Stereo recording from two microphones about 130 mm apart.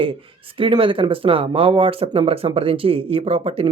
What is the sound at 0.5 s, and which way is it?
Speech, 40° right (ahead or behind).